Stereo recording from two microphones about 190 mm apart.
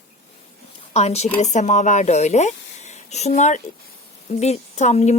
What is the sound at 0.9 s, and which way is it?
A woman's voice, 35° left (ahead or behind).